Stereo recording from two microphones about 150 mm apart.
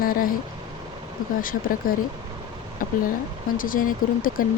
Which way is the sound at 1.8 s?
70° left (ahead or behind).